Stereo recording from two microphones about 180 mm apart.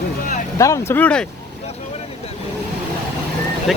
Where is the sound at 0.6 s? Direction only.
15° left (ahead or behind).